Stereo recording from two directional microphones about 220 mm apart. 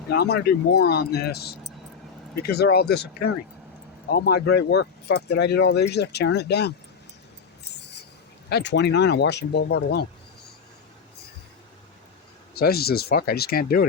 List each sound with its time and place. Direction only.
0.1 s speech: 45° left (ahead or behind)
8.4 s speech: 50° left (ahead or behind)
12.5 s speech: 45° left (ahead or behind)